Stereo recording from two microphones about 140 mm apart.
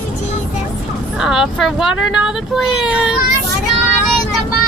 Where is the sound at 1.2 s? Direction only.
5° right (ahead or behind).